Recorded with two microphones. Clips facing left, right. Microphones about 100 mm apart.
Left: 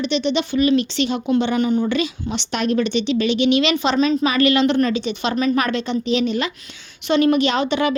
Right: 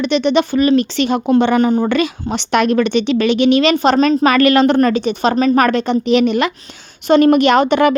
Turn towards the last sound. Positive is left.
turn(degrees=-55)  # may be behind; listen again after turning